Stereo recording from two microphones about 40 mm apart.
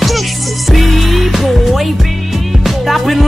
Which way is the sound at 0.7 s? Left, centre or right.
Centre.